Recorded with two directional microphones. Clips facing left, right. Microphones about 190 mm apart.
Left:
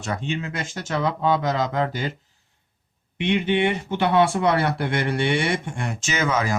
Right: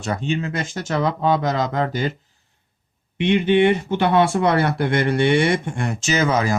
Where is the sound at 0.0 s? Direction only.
35° right (ahead or behind).